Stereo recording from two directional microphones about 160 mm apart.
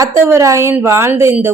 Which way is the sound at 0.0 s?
20° right (ahead or behind).